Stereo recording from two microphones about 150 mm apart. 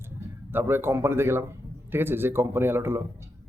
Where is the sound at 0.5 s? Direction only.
15° right (ahead or behind).